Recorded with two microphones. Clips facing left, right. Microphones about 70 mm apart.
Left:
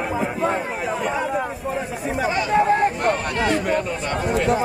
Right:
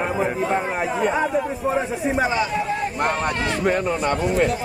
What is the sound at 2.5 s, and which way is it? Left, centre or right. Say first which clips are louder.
Speech: left 7 dB; left.